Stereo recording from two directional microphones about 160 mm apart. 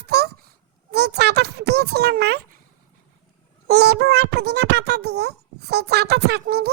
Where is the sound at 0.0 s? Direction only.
90° right.